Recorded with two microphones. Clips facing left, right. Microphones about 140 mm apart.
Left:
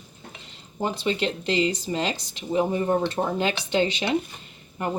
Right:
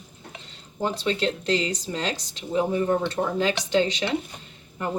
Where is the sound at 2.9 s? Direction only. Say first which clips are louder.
Even; 25° left (ahead or behind).